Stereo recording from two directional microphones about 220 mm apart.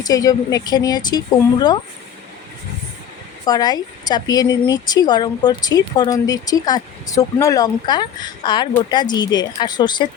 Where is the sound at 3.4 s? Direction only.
15° left (ahead or behind).